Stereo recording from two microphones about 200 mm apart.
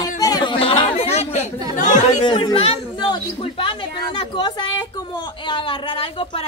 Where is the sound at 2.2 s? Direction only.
25° left (ahead or behind).